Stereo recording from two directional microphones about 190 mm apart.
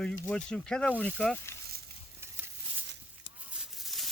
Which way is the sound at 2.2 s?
15° right (ahead or behind).